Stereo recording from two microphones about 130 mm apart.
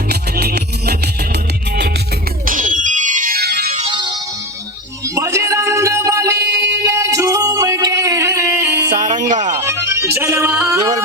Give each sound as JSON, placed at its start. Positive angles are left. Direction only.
{"t": 2.5, "sound": "music", "side_deg": -85}
{"t": 3.8, "sound": "music", "side_deg": -35}
{"t": 5.0, "sound": "music", "side_deg": -25}
{"t": 9.0, "sound": "music", "side_deg": -70}
{"t": 9.6, "sound": "music", "side_deg": -20}